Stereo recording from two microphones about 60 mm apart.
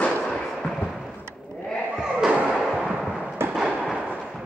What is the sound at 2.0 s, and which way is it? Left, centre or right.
Slam, centre.